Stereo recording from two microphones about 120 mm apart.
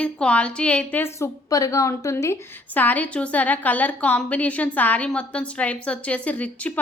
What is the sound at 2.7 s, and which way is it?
A woman's voice, 15° left (ahead or behind).